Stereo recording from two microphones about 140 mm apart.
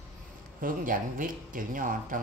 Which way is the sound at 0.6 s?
80° right.